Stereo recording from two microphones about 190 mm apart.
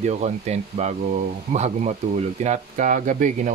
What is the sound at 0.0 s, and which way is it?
Speech, 40° right (ahead or behind).